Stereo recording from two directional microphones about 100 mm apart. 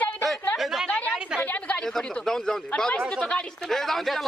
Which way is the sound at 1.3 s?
15° left (ahead or behind).